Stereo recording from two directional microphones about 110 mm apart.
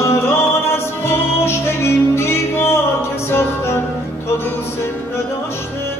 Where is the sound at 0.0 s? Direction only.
25° left (ahead or behind).